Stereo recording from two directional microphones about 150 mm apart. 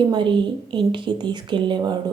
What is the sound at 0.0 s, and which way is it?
A woman's voice, 30° right (ahead or behind).